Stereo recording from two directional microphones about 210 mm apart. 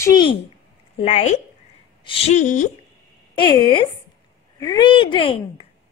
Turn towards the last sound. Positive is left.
turn(degrees=25)  # may be behind; listen again after turning